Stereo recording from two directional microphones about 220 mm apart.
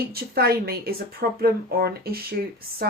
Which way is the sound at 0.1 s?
45° right (ahead or behind).